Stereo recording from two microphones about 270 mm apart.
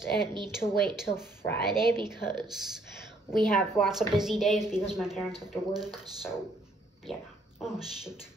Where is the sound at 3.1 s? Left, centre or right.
Centre.